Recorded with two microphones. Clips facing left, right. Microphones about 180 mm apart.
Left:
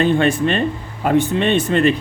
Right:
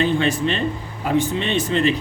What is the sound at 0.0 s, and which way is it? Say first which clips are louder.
Speech: left 4 dB; 55° left (ahead or behind).